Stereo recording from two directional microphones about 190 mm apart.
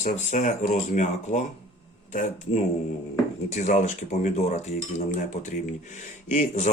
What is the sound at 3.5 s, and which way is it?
Speech, 40° left (ahead or behind).